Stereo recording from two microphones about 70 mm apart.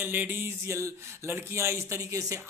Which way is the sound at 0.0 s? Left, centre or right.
Right.